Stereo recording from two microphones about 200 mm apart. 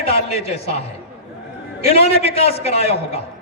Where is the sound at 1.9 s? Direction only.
30° left (ahead or behind).